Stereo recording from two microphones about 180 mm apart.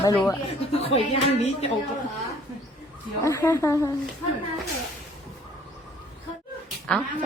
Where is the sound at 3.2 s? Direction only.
15° left (ahead or behind).